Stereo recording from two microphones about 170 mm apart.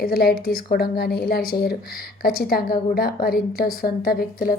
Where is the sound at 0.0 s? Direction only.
65° left (ahead or behind).